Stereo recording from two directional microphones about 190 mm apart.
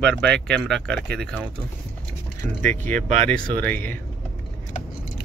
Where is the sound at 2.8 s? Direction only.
40° right (ahead or behind).